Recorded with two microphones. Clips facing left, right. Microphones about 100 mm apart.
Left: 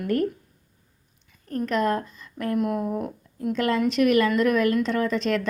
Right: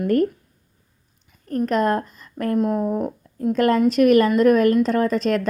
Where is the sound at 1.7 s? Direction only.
40° right (ahead or behind).